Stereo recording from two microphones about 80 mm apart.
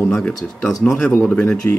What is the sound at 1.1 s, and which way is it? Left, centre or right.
Speech, centre.